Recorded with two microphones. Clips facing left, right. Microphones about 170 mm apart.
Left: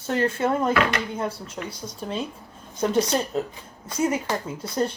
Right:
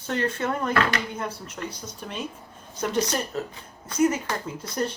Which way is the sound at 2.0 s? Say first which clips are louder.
Left 4 dB; 30° left (ahead or behind).